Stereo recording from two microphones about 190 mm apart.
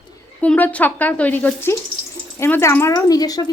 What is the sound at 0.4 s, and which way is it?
Speech, 5° left (ahead or behind).